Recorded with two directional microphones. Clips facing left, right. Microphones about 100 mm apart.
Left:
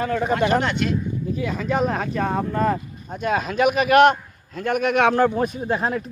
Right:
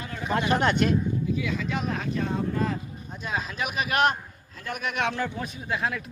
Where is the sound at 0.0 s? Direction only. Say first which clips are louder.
Left 8 dB; 55° left (ahead or behind).